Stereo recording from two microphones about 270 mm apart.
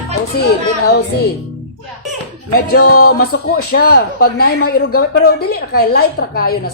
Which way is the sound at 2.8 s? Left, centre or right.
Left.